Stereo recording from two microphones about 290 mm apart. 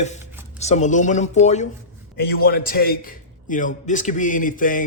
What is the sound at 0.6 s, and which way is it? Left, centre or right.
A man's voice, left.